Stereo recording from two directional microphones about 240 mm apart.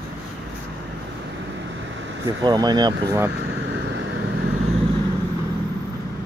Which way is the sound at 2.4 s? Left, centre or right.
Centre.